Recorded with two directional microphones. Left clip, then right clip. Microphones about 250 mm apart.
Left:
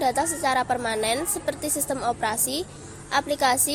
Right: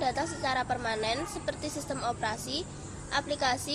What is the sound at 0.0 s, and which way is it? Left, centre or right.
A woman's voice, left.